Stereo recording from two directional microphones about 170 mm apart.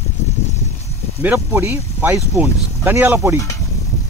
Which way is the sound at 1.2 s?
15° right (ahead or behind).